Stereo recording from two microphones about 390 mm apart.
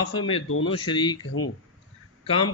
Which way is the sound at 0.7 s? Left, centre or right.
Centre.